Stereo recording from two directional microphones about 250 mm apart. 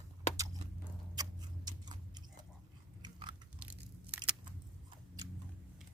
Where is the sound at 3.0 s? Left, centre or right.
Centre.